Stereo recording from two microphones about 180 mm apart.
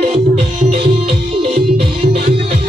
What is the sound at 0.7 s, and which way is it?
Music, 35° right (ahead or behind).